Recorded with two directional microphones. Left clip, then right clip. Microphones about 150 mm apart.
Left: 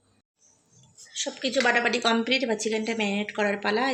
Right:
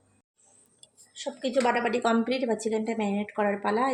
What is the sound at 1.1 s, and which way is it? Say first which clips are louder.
A woman's voice: left 1 dB; 10° right (ahead or behind).